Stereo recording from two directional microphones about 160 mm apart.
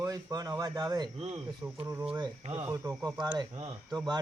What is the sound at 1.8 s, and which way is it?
Speech, 20° right (ahead or behind).